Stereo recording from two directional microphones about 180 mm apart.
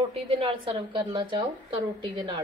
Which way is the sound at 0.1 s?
30° right (ahead or behind).